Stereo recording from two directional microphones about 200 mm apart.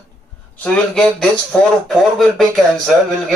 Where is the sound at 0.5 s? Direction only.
5° left (ahead or behind).